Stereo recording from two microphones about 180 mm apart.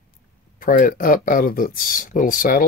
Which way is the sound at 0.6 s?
50° left (ahead or behind).